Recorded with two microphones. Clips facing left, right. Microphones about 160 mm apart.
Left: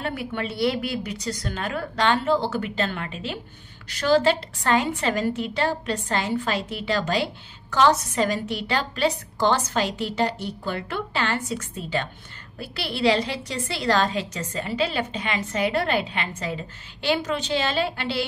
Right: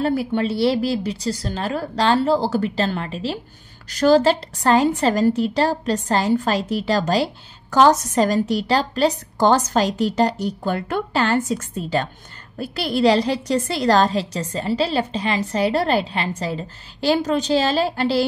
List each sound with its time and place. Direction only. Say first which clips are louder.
0.0 s a woman's voice: right 9 dB; 35° right (ahead or behind)